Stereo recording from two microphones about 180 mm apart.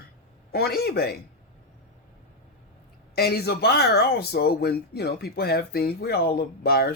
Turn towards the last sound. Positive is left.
turn(degrees=60)  # may be behind; listen again after turning